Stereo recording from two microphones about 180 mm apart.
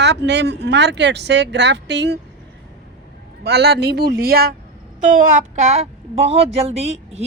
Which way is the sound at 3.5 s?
65° right (ahead or behind).